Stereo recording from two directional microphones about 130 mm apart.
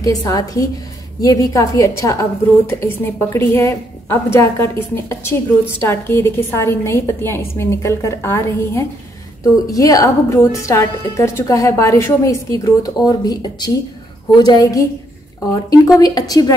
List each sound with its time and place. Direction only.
0.0 s a woman's voice: 30° left (ahead or behind)